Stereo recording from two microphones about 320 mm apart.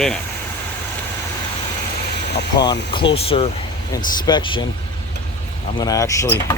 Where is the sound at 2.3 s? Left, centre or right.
Centre.